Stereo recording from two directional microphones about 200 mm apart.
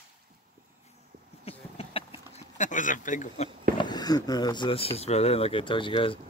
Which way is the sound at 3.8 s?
20° left (ahead or behind).